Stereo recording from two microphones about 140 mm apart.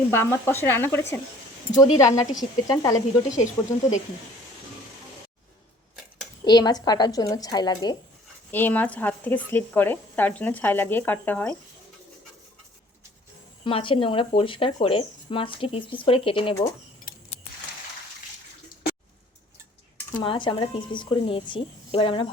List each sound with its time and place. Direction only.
0.1 s speech: 20° left (ahead or behind)
6.4 s speech: 30° left (ahead or behind)
8.4 s speech: 10° left (ahead or behind)
13.7 s speech: 40° left (ahead or behind)
20.1 s speech: 35° left (ahead or behind)